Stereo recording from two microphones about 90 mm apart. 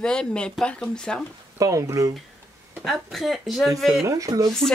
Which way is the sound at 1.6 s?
40° right (ahead or behind).